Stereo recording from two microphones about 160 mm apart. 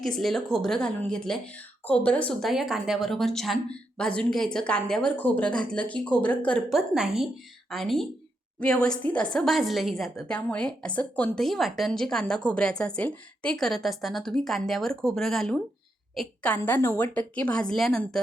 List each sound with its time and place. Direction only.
0.0 s a woman's voice: centre (ahead or behind)